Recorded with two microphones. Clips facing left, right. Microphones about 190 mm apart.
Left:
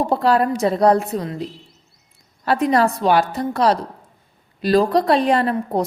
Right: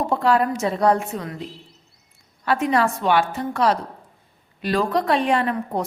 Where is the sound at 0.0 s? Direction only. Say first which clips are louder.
Left 2 dB; 35° left (ahead or behind).